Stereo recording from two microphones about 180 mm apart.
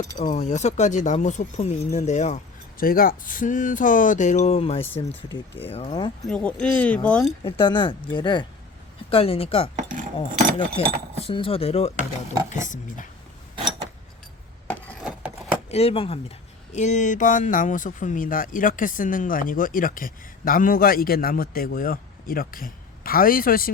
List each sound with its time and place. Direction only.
0.2 s speech: 45° left (ahead or behind)
6.2 s speech: 5° left (ahead or behind)
7.6 s speech: 25° left (ahead or behind)
9.7 s keys jangling: 45° right (ahead or behind)
10.8 s speech: 30° left (ahead or behind)
12.5 s speech: 45° left (ahead or behind)
15.7 s speech: 35° left (ahead or behind); by 23.7 s 55° left (ahead or behind)